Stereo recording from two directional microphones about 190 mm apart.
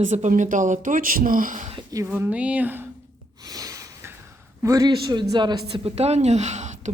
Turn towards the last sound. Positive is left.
turn(degrees=-40)  # may be behind; listen again after turning